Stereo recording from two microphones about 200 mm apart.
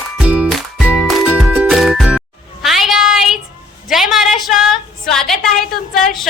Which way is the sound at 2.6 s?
Centre (ahead or behind).